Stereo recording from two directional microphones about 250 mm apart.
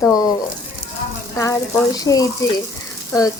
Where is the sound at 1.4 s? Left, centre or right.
Centre.